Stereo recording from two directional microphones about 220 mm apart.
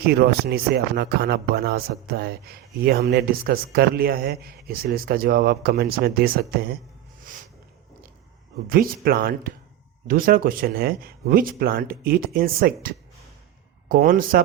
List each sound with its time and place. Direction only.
0.0 s speech: 45° right (ahead or behind)
8.7 s speech: 40° right (ahead or behind)